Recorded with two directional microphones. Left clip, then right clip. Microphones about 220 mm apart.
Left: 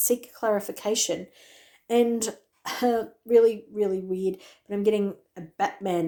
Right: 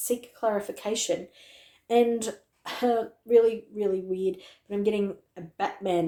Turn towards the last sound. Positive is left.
turn(degrees=25)  # may be behind; listen again after turning